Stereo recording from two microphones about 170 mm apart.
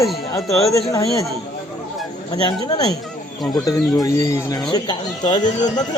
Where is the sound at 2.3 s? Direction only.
25° left (ahead or behind).